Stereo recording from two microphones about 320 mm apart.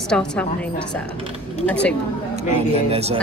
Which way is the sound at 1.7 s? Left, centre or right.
Centre.